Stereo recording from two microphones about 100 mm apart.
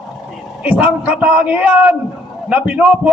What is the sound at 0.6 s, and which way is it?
A man's voice, 15° right (ahead or behind).